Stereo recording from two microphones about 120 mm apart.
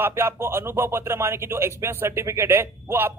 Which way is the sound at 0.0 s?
20° right (ahead or behind).